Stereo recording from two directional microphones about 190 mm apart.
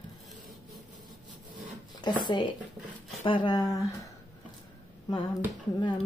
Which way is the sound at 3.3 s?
25° left (ahead or behind).